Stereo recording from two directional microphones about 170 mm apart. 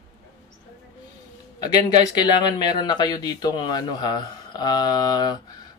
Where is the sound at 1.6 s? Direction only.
25° left (ahead or behind).